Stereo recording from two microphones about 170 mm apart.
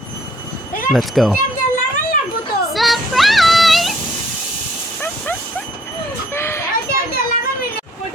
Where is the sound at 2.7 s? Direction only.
Centre (ahead or behind).